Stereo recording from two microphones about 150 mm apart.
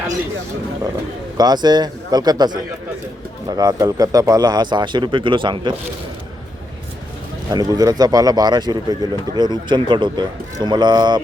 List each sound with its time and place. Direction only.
1.4 s speech: 25° right (ahead or behind)
7.5 s speech: 25° right (ahead or behind)